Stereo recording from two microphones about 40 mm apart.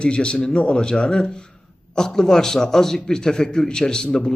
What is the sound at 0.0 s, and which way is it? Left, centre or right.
A man's voice, left.